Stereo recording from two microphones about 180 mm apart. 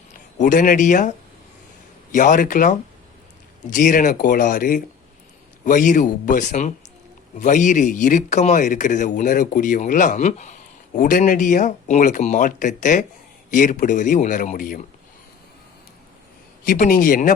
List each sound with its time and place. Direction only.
0.3 s speech: 45° left (ahead or behind)
2.1 s speech: 45° left (ahead or behind)
16.6 s speech: 50° left (ahead or behind)